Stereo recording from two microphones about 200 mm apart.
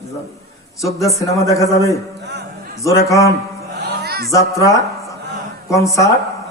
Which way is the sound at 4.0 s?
50° right (ahead or behind).